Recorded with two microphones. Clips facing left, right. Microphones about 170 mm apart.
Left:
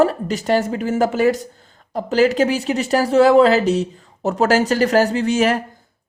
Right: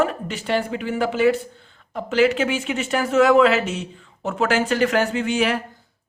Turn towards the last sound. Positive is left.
turn(degrees=40)  # may be behind; listen again after turning